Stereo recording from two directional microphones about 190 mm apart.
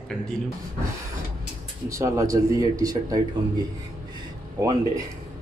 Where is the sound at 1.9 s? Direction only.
15° right (ahead or behind).